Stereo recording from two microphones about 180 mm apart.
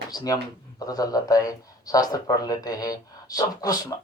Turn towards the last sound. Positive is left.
turn(degrees=20)  # may be behind; listen again after turning